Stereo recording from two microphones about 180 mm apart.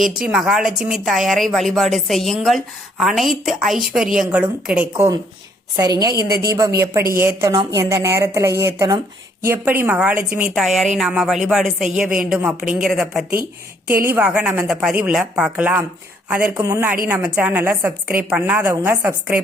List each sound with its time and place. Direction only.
0.3 s a woman's voice: 5° right (ahead or behind); by 6.2 s 20° right (ahead or behind)
6.2 s a woman's voice: 60° right (ahead or behind)
7.1 s a woman's voice: 15° right (ahead or behind)
13.8 s a woman's voice: 10° right (ahead or behind)